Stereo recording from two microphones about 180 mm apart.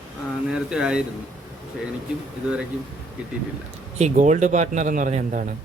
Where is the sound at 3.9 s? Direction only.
40° right (ahead or behind).